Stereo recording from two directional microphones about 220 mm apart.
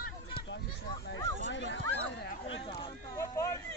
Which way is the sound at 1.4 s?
55° left (ahead or behind).